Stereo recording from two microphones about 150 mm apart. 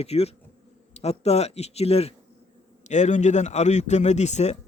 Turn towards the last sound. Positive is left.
turn(degrees=50)  # may be behind; listen again after turning